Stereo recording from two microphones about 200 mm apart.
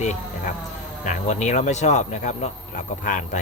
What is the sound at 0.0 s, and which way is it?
Speech, 35° left (ahead or behind).